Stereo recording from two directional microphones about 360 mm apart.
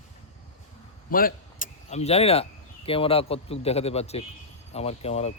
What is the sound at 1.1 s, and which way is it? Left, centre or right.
Speech, left.